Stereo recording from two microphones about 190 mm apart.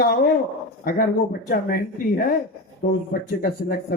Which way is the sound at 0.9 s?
50° left (ahead or behind).